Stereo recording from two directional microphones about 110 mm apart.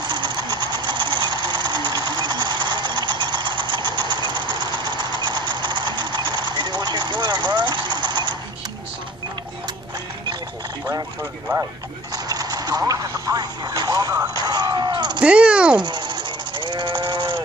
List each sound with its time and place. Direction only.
0.0 s sewing machine: 45° right (ahead or behind)
12.3 s speech: 35° right (ahead or behind)
14.4 s a sound: 40° right (ahead or behind)
15.1 s speech: 10° right (ahead or behind)
15.8 s sheep: 45° right (ahead or behind)